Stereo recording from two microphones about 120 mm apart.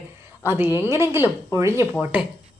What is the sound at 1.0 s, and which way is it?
Speech, 20° right (ahead or behind).